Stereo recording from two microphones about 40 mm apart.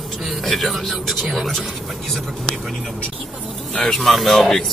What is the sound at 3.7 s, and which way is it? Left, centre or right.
Speech, centre.